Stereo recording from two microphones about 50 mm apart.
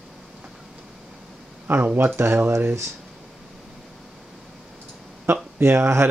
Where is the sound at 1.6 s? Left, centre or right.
Right.